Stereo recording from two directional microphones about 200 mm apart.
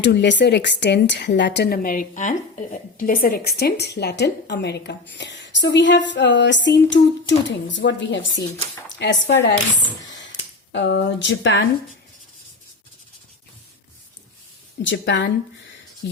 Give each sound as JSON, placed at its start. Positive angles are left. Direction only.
{"t": 0.0, "sound": "speech", "side_deg": 60}
{"t": 10.7, "sound": "speech", "side_deg": 60}
{"t": 14.8, "sound": "speech", "side_deg": 65}